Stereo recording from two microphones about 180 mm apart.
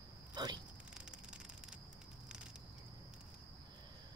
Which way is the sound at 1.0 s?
5° right (ahead or behind).